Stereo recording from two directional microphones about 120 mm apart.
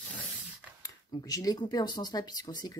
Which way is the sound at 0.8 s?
30° left (ahead or behind).